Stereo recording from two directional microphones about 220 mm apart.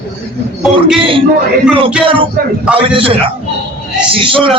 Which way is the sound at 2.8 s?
25° right (ahead or behind).